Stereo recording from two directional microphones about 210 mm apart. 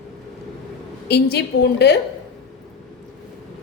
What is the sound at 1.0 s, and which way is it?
Speech, 50° left (ahead or behind).